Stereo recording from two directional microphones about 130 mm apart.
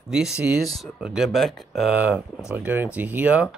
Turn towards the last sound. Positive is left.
turn(degrees=-10)  # may be behind; listen again after turning